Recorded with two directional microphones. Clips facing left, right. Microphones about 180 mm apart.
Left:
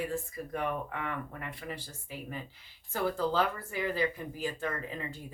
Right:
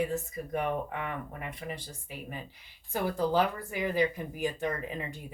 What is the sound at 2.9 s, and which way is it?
Speech, 15° right (ahead or behind).